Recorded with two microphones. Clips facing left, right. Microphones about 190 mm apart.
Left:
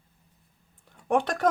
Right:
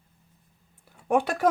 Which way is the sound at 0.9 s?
10° right (ahead or behind).